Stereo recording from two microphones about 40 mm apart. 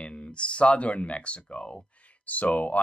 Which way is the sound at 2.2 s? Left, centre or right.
Left.